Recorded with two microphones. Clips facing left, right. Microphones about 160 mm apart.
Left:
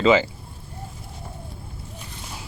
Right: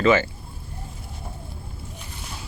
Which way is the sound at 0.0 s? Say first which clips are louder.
Left 1 dB; 15° left (ahead or behind).